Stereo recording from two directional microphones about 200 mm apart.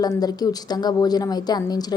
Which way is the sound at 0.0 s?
20° left (ahead or behind).